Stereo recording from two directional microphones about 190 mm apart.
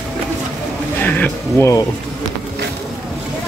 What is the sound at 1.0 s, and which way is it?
Speech, 10° left (ahead or behind).